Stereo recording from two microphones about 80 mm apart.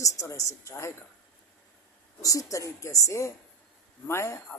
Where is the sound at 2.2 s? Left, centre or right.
Left.